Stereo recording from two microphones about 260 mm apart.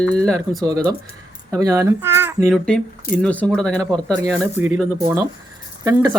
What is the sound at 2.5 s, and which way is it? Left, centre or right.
Speech, centre.